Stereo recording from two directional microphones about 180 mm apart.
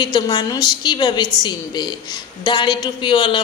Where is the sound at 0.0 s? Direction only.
25° left (ahead or behind).